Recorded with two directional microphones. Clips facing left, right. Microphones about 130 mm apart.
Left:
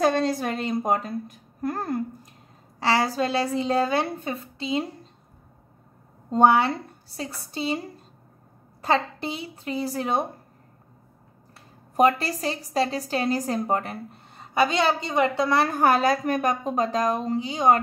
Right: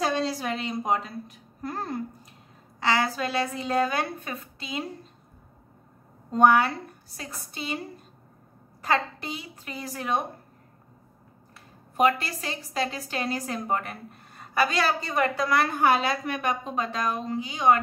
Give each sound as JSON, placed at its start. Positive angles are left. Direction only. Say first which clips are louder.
{"t": 0.0, "sound": "a woman's voice", "louder": "left 5 dB", "side_deg": 50}
{"t": 2.8, "sound": "a woman's voice", "louder": "left 3 dB", "side_deg": 35}
{"t": 6.3, "sound": "a woman's voice", "louder": "left 1 dB", "side_deg": 25}
{"t": 8.8, "sound": "a woman's voice", "louder": "left 3 dB", "side_deg": 30}
{"t": 11.5, "sound": "a woman's voice", "louder": "left 5 dB", "side_deg": 35}